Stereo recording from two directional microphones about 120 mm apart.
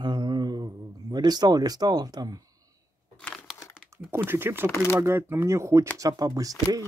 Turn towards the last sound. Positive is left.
turn(degrees=-30)  # may be behind; listen again after turning